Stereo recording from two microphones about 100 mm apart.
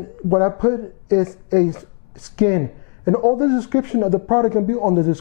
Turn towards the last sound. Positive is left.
turn(degrees=20)  # may be behind; listen again after turning